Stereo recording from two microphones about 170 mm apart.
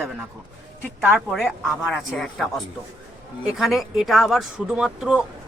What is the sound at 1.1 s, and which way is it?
Speech, centre (ahead or behind).